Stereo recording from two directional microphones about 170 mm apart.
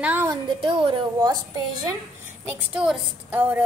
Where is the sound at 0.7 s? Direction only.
25° right (ahead or behind).